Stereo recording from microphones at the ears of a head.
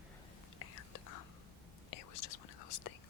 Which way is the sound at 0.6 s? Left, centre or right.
Left.